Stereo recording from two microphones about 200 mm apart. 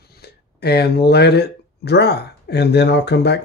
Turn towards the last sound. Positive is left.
turn(degrees=55)  # may be behind; listen again after turning